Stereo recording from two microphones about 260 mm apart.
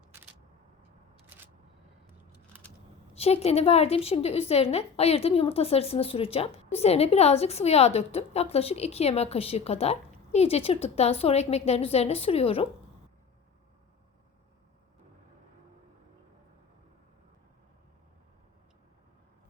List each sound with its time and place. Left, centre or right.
1.3 s single-lens reflex camera: centre
3.2 s a woman's voice: left